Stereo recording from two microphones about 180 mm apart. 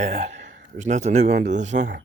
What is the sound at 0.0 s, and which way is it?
A man's voice, 40° right (ahead or behind).